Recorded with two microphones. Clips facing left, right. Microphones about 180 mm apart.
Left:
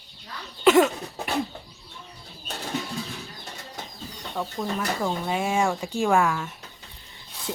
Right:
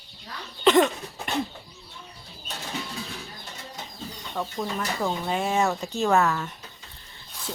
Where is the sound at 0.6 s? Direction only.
5° left (ahead or behind).